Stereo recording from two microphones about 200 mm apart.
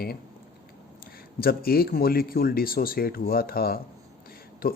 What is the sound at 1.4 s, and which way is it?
Speech, 50° left (ahead or behind).